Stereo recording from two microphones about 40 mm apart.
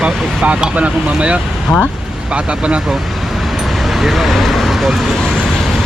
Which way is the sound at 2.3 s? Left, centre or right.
Right.